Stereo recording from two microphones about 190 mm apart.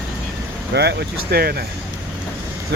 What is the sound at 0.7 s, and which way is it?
Speech, 60° right (ahead or behind).